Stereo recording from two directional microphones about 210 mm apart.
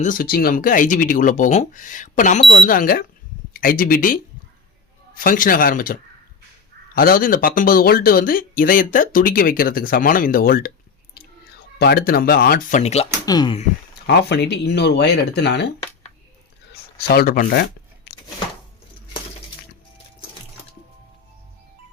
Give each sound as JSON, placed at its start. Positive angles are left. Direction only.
{"t": 0.0, "sound": "speech", "side_deg": 40}
{"t": 11.8, "sound": "speech", "side_deg": 50}
{"t": 13.2, "sound": "speech", "side_deg": 20}
{"t": 14.1, "sound": "speech", "side_deg": 55}
{"t": 16.7, "sound": "a sound", "side_deg": 45}